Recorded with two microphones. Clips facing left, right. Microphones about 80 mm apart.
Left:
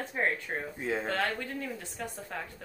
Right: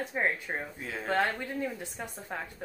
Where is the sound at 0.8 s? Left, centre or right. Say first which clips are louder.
Left 6 dB; left.